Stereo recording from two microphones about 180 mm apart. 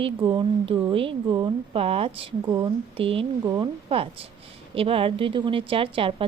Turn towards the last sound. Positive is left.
turn(degrees=-30)  # may be behind; listen again after turning